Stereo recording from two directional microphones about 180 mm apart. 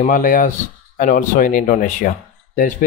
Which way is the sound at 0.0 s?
45° left (ahead or behind).